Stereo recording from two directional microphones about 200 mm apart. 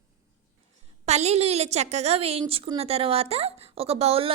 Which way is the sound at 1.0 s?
35° right (ahead or behind).